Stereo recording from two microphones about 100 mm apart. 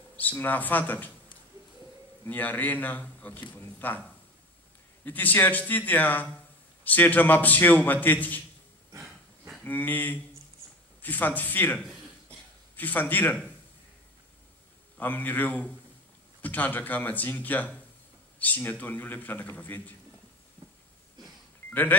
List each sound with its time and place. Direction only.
0.2 s a man's voice: 15° left (ahead or behind)
2.2 s a man's voice: 15° left (ahead or behind)
5.0 s a man's voice: 20° left (ahead or behind)
9.6 s a man's voice: 20° left (ahead or behind)
15.0 s a man's voice: 20° left (ahead or behind)
21.2 s a sound: 45° right (ahead or behind)
21.6 s telephone dialing: 20° left (ahead or behind)